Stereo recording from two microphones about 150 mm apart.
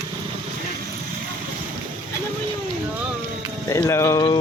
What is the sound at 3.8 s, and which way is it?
Speech, 20° left (ahead or behind).